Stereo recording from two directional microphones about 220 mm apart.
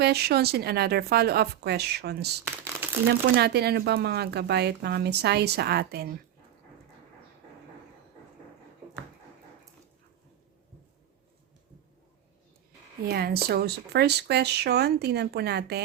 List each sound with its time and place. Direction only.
0.0 s speech: 45° right (ahead or behind)
13.1 s speech: 45° right (ahead or behind)